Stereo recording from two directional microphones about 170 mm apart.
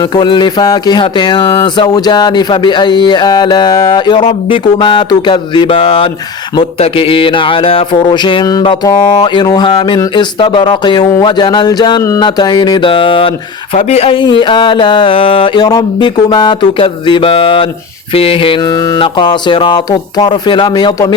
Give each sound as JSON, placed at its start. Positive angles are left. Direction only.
{"t": 0.0, "sound": "speech", "side_deg": 25}